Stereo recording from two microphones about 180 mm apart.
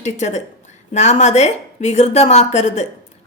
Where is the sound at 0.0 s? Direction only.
40° left (ahead or behind).